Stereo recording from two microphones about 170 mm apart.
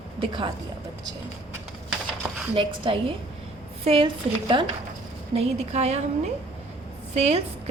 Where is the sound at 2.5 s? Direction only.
30° right (ahead or behind).